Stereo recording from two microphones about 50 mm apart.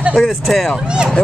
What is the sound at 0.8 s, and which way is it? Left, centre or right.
Speech, centre.